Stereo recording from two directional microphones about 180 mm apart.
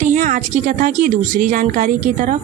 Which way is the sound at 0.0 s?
45° right (ahead or behind).